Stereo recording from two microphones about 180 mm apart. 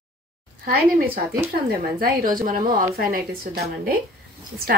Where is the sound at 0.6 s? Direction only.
55° right (ahead or behind).